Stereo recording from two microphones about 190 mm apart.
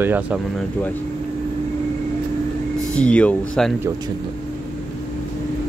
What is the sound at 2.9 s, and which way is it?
Speech, 5° left (ahead or behind).